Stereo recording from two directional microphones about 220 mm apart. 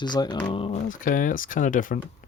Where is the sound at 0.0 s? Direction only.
20° left (ahead or behind).